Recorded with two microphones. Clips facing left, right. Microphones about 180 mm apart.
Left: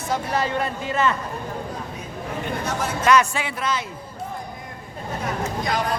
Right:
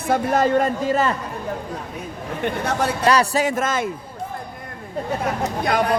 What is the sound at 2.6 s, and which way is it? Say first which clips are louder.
Speech: right 5 dB; 70° right (ahead or behind).